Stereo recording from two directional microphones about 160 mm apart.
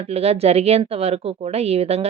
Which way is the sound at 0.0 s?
40° right (ahead or behind).